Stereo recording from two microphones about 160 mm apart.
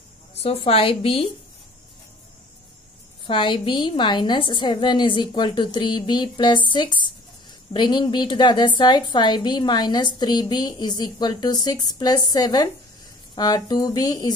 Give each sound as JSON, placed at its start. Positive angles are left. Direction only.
{"t": 0.3, "sound": "a woman's voice", "side_deg": 40}
{"t": 3.3, "sound": "a woman's voice", "side_deg": 30}